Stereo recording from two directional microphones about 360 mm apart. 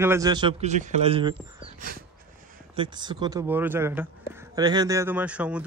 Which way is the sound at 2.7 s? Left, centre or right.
Centre.